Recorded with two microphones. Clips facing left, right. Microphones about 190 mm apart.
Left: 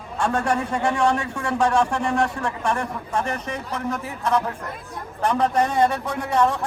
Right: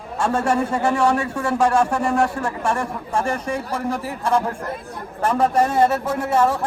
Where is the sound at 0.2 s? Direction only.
5° right (ahead or behind).